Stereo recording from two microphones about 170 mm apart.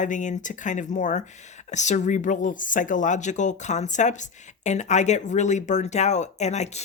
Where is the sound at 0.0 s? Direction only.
45° left (ahead or behind).